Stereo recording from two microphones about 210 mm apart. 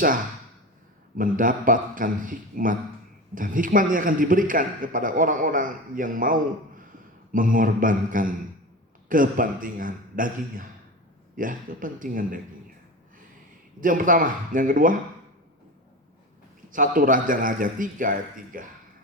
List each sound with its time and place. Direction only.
1.2 s speech: 40° right (ahead or behind)
13.8 s speech: 40° right (ahead or behind)
16.7 s speech: 40° right (ahead or behind)